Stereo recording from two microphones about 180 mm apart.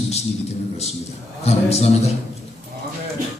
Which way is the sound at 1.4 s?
35° left (ahead or behind).